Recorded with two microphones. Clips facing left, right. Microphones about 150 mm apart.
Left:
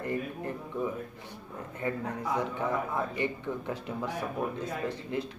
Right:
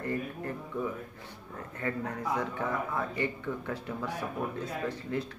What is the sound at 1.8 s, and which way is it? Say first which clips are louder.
Speech: left 1 dB; 20° left (ahead or behind).